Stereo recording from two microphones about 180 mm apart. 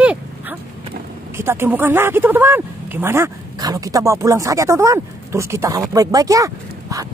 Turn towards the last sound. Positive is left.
turn(degrees=-20)  # may be behind; listen again after turning